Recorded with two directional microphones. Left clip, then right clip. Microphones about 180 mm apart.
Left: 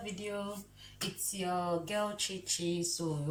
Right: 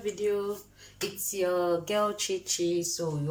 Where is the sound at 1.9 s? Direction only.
40° right (ahead or behind).